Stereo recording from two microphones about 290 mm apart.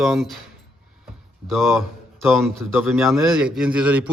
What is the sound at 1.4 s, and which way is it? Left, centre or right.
A man's voice, centre.